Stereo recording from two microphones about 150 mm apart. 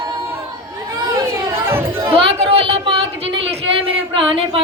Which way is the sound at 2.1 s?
40° right (ahead or behind).